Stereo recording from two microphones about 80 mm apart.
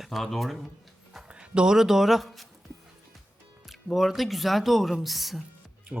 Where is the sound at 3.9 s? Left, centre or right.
Centre.